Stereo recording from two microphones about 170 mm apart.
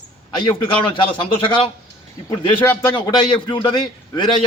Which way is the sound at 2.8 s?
25° left (ahead or behind).